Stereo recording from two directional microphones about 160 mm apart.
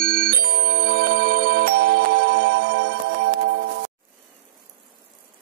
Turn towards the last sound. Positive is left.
turn(degrees=-80)